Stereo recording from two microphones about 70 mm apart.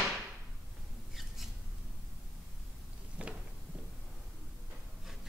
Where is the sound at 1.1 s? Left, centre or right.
Centre.